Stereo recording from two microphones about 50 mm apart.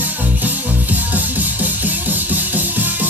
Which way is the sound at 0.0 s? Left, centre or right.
Right.